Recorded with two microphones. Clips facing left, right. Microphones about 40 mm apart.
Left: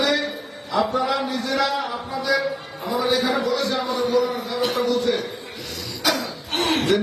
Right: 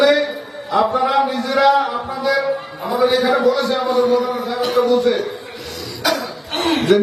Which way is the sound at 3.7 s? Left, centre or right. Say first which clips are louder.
Right 6 dB; centre.